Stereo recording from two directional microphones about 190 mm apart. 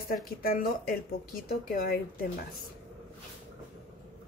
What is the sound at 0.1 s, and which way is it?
Speech, 50° left (ahead or behind).